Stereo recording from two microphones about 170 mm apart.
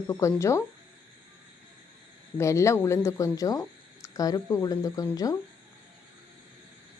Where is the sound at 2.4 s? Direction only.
15° left (ahead or behind).